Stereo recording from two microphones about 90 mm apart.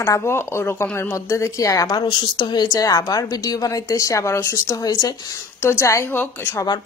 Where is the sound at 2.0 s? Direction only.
55° left (ahead or behind).